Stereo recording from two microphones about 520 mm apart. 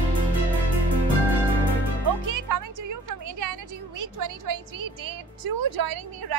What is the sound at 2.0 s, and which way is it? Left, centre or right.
Music, right.